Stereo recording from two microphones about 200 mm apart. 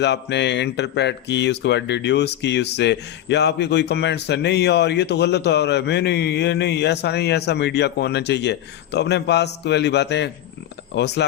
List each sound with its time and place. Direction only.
0.0 s speech: 60° left (ahead or behind)